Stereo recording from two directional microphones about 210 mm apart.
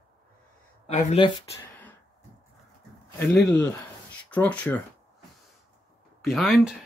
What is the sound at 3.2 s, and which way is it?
Speech, 5° left (ahead or behind).